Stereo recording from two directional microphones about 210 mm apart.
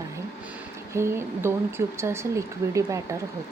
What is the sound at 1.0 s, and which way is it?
Speech, 10° right (ahead or behind).